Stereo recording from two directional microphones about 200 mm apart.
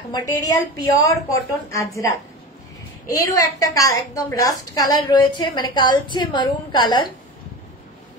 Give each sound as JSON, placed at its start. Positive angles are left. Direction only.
{"t": 0.1, "sound": "a woman's voice", "side_deg": 15}